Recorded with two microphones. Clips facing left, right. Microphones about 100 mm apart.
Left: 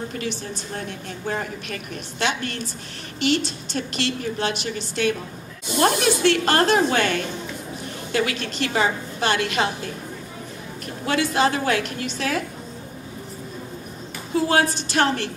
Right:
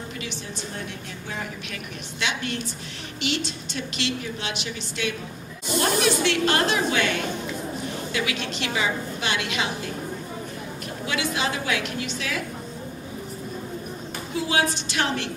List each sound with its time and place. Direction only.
0.2 s a woman's voice: 40° left (ahead or behind)
11.1 s a woman's voice: 45° left (ahead or behind)
14.3 s a woman's voice: 45° left (ahead or behind)